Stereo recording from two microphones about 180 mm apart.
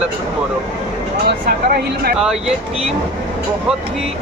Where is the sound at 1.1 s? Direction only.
55° right (ahead or behind).